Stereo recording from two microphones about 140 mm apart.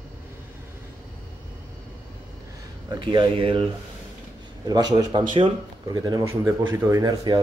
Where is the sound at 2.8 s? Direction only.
35° right (ahead or behind).